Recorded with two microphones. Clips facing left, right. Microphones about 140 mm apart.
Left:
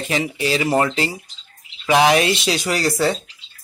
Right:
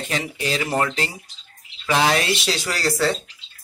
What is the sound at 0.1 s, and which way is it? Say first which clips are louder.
Speech: left 5 dB; 5° left (ahead or behind).